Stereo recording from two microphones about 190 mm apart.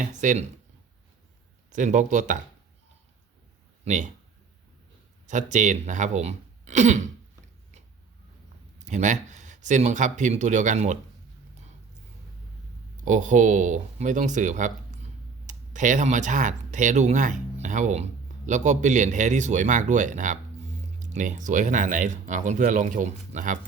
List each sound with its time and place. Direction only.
0.0 s speech: 40° right (ahead or behind)
1.7 s speech: 40° right (ahead or behind)
3.8 s speech: 40° right (ahead or behind)
5.2 s speech: 40° right (ahead or behind)
8.8 s speech: 40° right (ahead or behind)
13.1 s speech: 40° right (ahead or behind)